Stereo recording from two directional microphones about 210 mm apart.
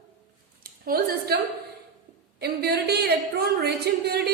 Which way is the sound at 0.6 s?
45° right (ahead or behind).